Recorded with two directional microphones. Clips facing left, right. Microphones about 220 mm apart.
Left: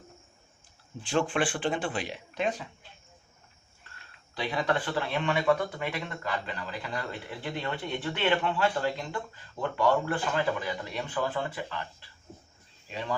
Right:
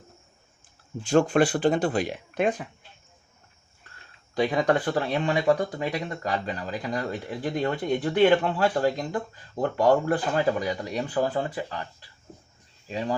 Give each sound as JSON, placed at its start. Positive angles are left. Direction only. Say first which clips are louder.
{"t": 1.0, "sound": "speech", "louder": "right 7 dB", "side_deg": -45}
{"t": 4.4, "sound": "speech", "louder": "right 7 dB", "side_deg": -45}